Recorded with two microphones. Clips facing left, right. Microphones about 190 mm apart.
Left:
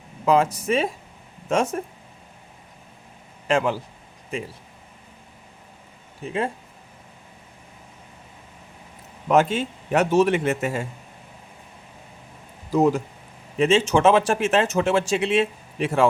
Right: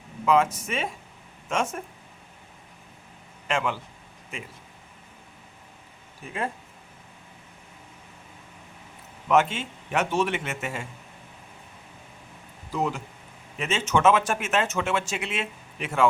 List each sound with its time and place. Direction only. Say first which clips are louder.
0.3 s speech: left 3 dB; 35° left (ahead or behind)
3.4 s speech: left 6 dB; 35° left (ahead or behind)
6.2 s speech: left 5 dB; 25° left (ahead or behind)
9.3 s speech: left 3 dB; 35° left (ahead or behind)
12.7 s speech: left 9 dB; 40° left (ahead or behind)
13.6 s speech: left 7 dB; 30° left (ahead or behind)